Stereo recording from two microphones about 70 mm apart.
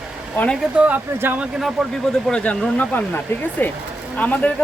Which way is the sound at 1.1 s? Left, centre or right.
Right.